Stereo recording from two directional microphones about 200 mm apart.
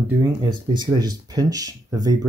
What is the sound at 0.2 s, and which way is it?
Speech, 20° right (ahead or behind).